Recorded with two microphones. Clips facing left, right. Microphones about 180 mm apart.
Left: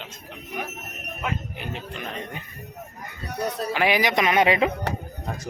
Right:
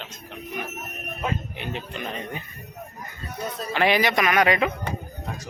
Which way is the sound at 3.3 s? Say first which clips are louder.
Left 4 dB; 70° left (ahead or behind).